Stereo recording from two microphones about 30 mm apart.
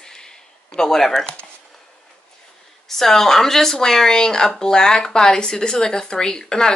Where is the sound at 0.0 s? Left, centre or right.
Centre.